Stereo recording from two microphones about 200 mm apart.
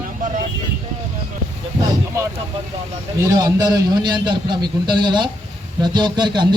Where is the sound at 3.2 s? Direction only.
20° right (ahead or behind).